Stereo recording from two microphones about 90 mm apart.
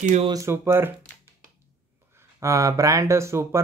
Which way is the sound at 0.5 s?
25° right (ahead or behind).